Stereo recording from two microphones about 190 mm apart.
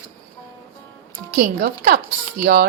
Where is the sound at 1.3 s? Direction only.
50° right (ahead or behind).